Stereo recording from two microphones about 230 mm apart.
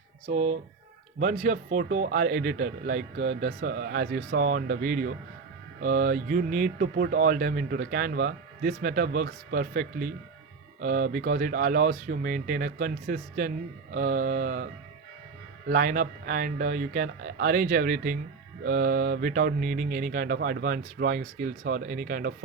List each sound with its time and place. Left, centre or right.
0.3 s speech: right